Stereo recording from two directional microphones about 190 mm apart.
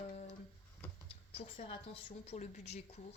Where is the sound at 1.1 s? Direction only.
30° left (ahead or behind).